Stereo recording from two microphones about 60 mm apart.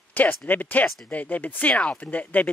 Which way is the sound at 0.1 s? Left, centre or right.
Left.